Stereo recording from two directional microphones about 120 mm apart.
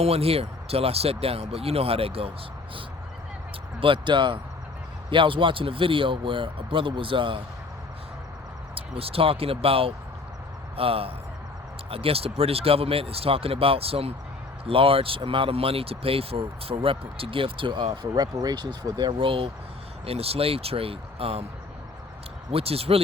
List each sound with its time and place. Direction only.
0.0 s speech: 55° right (ahead or behind)
3.8 s speech: 45° right (ahead or behind)
8.7 s speech: 50° right (ahead or behind)
17.9 s speech: 35° right (ahead or behind); by 21.4 s 55° right (ahead or behind)
22.5 s speech: 55° right (ahead or behind)